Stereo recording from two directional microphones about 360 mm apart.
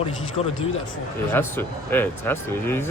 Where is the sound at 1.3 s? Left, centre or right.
Centre.